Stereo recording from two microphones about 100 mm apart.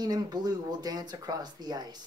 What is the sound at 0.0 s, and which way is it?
Speech, 40° right (ahead or behind).